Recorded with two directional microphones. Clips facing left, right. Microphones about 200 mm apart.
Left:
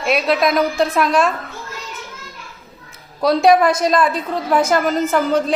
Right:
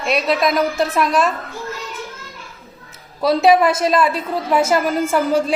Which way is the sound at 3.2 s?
5° right (ahead or behind).